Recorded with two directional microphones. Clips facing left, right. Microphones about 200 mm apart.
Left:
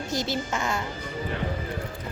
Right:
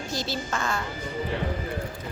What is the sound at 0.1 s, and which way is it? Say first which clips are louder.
Speech: left 2 dB; 20° left (ahead or behind).